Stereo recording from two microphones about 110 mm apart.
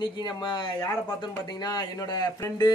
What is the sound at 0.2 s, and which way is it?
Speech, 45° left (ahead or behind).